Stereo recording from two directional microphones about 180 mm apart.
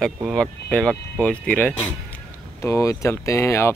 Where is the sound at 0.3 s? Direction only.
5° left (ahead or behind).